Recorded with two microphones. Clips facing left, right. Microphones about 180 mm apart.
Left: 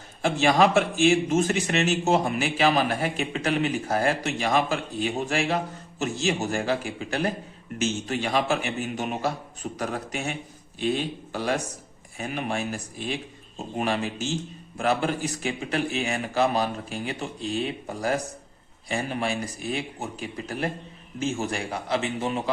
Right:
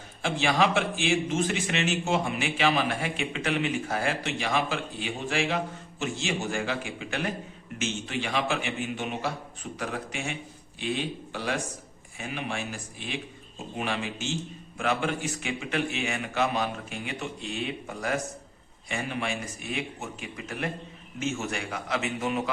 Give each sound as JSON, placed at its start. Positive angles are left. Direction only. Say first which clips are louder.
{"t": 0.2, "sound": "a man's voice", "louder": "left 5 dB", "side_deg": 45}